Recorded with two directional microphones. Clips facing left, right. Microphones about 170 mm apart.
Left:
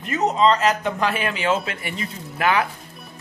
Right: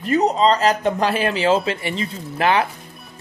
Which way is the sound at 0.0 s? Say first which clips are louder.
Right 2 dB; 35° right (ahead or behind).